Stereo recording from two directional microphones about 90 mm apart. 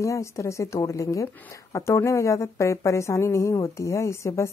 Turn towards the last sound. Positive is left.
turn(degrees=30)  # may be behind; listen again after turning